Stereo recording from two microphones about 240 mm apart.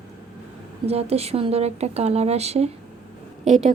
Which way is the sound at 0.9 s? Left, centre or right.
Right.